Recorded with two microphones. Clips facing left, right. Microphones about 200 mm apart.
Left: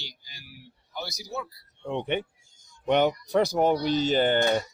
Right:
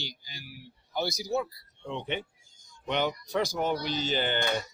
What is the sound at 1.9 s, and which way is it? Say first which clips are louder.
Speech: left 6 dB; 55° left (ahead or behind).